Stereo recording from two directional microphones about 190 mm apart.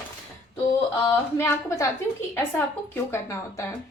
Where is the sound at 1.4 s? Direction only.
10° left (ahead or behind).